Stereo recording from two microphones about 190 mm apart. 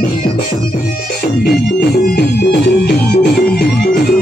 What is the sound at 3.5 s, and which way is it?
Music, 55° left (ahead or behind).